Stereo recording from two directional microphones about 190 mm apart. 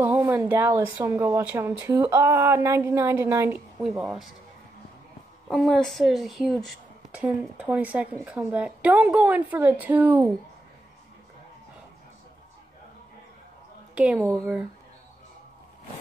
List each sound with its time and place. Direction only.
0.0 s speech: 10° right (ahead or behind)
4.0 s a woman's voice: 5° right (ahead or behind)
5.5 s speech: centre (ahead or behind)
13.9 s a woman's voice: 5° right (ahead or behind)